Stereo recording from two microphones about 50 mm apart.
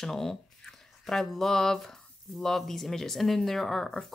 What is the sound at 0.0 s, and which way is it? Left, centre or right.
Speech, centre.